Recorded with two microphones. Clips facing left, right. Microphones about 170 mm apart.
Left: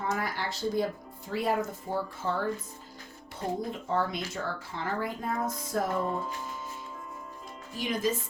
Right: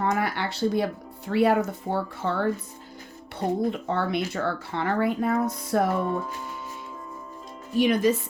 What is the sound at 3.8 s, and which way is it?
Speech, 70° right (ahead or behind).